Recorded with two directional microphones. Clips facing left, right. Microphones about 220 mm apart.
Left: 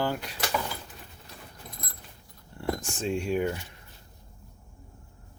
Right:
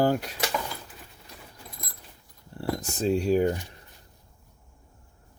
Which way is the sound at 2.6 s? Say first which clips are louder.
Right 3 dB; 35° right (ahead or behind).